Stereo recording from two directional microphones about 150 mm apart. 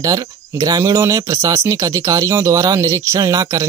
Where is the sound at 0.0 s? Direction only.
25° right (ahead or behind).